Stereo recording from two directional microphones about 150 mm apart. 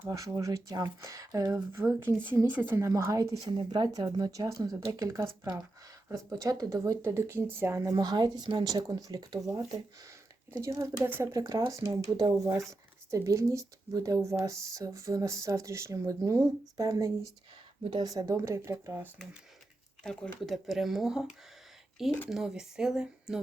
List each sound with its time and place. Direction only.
0.1 s a woman's voice: 20° right (ahead or behind)
20.1 s speech: centre (ahead or behind)
22.3 s speech: 5° right (ahead or behind)